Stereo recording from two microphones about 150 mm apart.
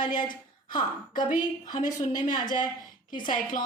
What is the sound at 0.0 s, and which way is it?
Speech, 65° left (ahead or behind).